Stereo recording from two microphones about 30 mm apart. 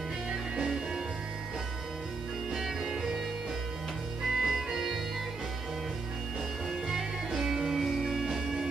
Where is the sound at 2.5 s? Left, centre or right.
Centre.